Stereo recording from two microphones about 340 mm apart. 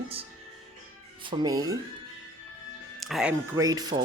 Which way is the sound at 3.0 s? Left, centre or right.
Centre.